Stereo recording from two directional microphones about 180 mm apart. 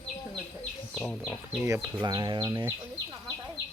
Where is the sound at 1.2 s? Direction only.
10° right (ahead or behind).